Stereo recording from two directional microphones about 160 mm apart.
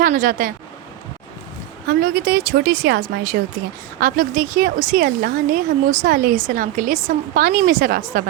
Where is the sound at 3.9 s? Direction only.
60° right (ahead or behind).